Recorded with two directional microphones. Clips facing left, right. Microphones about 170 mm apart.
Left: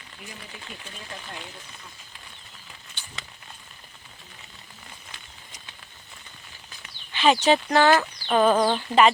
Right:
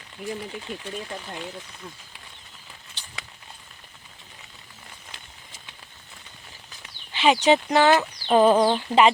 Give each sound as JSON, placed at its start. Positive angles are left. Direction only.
{"t": 0.2, "sound": "speech", "side_deg": -45}
{"t": 7.2, "sound": "speech", "side_deg": -20}